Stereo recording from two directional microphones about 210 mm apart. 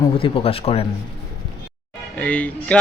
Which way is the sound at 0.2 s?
25° left (ahead or behind).